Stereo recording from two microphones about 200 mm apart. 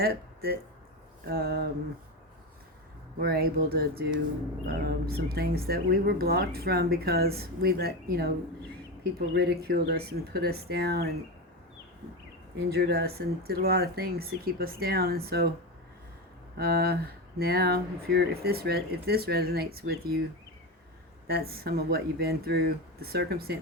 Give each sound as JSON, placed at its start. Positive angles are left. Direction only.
{"t": 0.0, "sound": "speech", "side_deg": -50}
{"t": 3.2, "sound": "speech", "side_deg": -50}
{"t": 12.7, "sound": "speech", "side_deg": -55}
{"t": 16.6, "sound": "speech", "side_deg": -50}
{"t": 21.2, "sound": "speech", "side_deg": -50}